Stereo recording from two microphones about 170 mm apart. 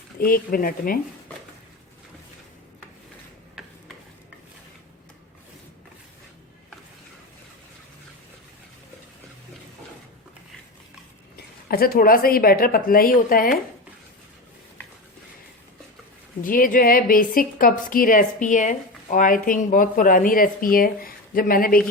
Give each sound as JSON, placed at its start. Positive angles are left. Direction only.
{"t": 0.2, "sound": "a woman's voice", "side_deg": 60}
{"t": 11.3, "sound": "a woman's voice", "side_deg": 65}
{"t": 16.4, "sound": "a woman's voice", "side_deg": 55}